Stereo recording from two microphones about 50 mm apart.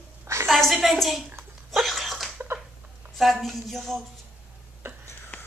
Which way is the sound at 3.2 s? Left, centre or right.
Centre.